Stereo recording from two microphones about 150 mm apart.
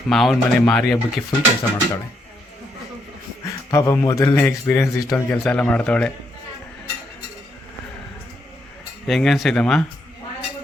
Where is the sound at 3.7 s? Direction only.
20° left (ahead or behind).